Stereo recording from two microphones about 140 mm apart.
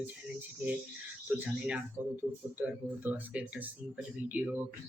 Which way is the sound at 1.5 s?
10° right (ahead or behind).